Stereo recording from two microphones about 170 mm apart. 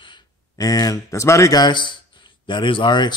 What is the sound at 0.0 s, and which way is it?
Speech, 25° left (ahead or behind).